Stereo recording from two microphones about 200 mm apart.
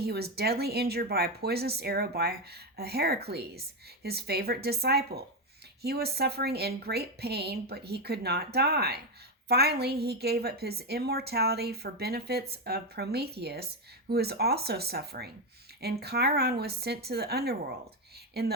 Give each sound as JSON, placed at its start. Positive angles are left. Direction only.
{"t": 0.0, "sound": "a woman's voice", "side_deg": -50}